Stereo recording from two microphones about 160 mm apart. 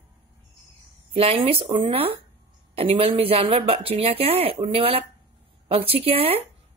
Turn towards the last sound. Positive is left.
turn(degrees=-35)  # may be behind; listen again after turning